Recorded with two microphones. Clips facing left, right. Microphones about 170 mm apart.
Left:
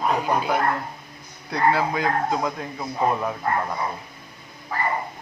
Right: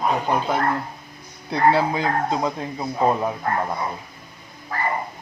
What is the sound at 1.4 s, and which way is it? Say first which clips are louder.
Speech: right 3 dB; 25° right (ahead or behind).